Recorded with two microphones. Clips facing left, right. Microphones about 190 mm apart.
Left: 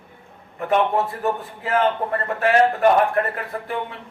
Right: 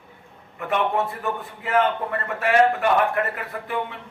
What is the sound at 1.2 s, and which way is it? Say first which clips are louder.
A man's voice: left 4 dB; 35° left (ahead or behind).